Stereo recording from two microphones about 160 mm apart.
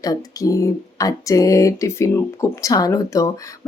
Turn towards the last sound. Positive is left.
turn(degrees=20)  # may be behind; listen again after turning